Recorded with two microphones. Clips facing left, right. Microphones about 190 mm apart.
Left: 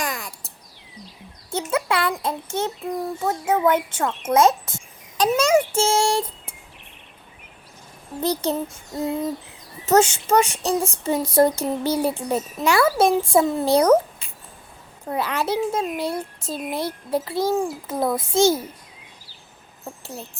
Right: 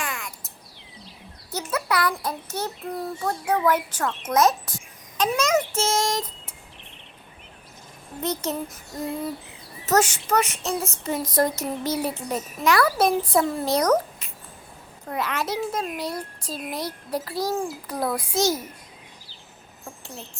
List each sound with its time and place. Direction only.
0.0 s a sound: 35° left (ahead or behind)
1.5 s a child's voice: 25° left (ahead or behind)
2.8 s child singing: 10° left (ahead or behind)
3.9 s a child's voice: 30° left (ahead or behind)
8.2 s a child's voice: 35° left (ahead or behind)
10.8 s child singing: 10° left (ahead or behind)
11.0 s a child's voice: 30° left (ahead or behind)